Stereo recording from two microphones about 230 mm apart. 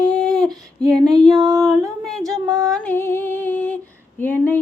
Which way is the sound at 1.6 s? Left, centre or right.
Centre.